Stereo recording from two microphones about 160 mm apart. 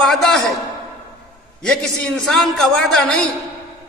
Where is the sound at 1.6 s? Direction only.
5° left (ahead or behind).